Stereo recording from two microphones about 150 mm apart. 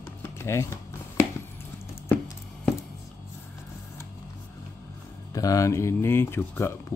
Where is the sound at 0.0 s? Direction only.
15° left (ahead or behind).